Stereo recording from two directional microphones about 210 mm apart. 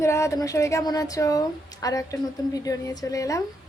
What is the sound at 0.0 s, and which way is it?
A woman's voice, 15° left (ahead or behind).